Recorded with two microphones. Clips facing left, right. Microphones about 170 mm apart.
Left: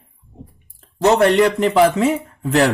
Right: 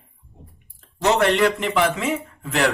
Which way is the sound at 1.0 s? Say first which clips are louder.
Left 5 dB; 40° left (ahead or behind).